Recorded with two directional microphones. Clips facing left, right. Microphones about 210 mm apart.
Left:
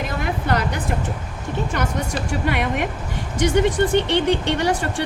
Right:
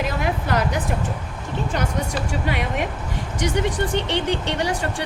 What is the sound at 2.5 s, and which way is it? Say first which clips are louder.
Speech: left 3 dB; 55° left (ahead or behind).